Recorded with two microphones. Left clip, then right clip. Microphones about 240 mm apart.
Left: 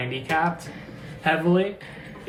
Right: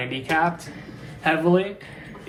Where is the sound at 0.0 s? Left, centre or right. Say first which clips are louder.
Right 2 dB; right.